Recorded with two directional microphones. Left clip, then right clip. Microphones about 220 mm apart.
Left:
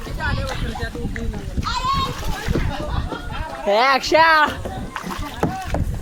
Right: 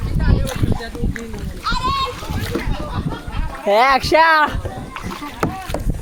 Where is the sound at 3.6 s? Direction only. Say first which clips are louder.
Right 3 dB; 25° right (ahead or behind).